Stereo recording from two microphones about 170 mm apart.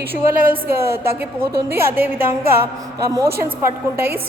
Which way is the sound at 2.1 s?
60° right (ahead or behind).